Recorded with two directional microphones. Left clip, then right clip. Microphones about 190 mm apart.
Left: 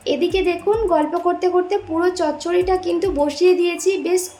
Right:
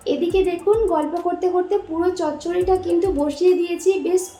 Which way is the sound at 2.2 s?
40° left (ahead or behind).